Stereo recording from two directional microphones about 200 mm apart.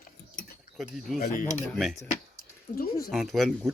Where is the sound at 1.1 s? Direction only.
40° left (ahead or behind).